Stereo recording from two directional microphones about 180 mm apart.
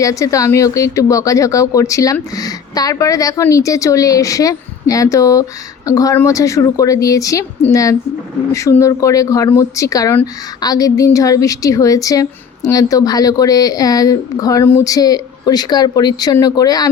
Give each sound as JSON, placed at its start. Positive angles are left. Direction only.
{"t": 0.0, "sound": "speech", "side_deg": 20}